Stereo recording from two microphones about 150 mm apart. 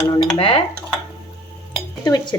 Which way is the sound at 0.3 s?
40° left (ahead or behind).